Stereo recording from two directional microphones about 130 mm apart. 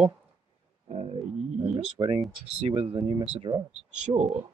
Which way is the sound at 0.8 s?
50° right (ahead or behind).